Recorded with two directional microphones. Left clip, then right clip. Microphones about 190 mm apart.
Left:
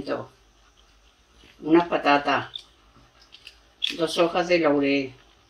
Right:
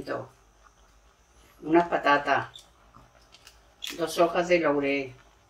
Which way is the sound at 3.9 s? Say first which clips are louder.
Left 1 dB; 35° left (ahead or behind).